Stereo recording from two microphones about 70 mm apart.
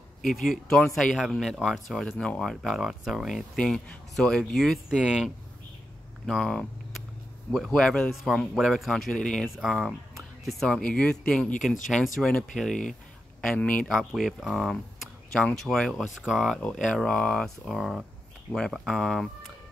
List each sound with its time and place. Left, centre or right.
0.2 s speech: centre
2.6 s speech: centre
3.5 s speech: centre
4.8 s speech: centre
6.2 s speech: centre
8.1 s speech: centre
13.6 s speech: centre
14.1 s speech: centre
16.2 s speech: centre
16.4 s speech: centre
17.7 s speech: centre